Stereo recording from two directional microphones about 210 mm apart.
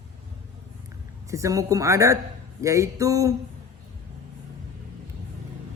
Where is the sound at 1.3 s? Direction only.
15° right (ahead or behind).